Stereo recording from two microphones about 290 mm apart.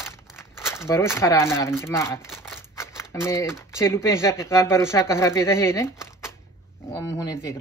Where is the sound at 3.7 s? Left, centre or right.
Centre.